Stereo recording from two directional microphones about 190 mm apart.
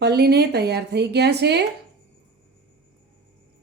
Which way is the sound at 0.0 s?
60° right (ahead or behind).